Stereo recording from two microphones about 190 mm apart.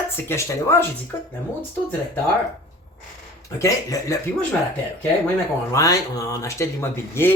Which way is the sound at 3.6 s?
15° left (ahead or behind).